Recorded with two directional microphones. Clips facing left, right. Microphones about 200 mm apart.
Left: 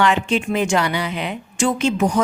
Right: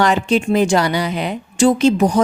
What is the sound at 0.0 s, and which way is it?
Speech, 40° right (ahead or behind).